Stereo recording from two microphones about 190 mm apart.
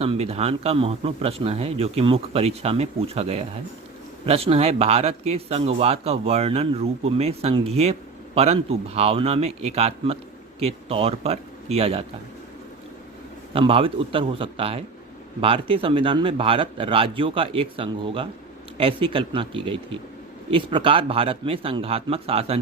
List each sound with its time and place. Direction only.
0.0 s speech: 30° right (ahead or behind)
13.5 s a man's voice: 30° right (ahead or behind)